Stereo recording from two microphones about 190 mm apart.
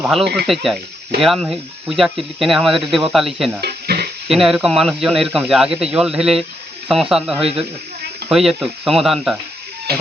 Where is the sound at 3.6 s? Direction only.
55° right (ahead or behind).